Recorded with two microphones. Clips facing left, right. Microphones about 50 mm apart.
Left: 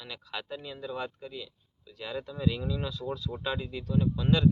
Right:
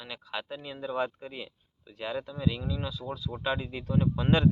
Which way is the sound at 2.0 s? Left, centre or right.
Centre.